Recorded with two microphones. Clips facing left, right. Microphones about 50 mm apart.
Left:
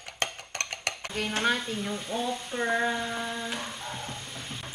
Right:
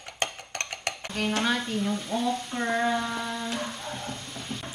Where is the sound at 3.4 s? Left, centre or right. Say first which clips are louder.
Right 2 dB; centre.